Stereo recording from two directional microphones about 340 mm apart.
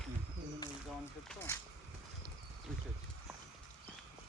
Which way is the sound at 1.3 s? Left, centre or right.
Centre.